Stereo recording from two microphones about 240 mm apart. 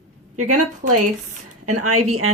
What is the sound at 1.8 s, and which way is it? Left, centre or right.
Speech, right.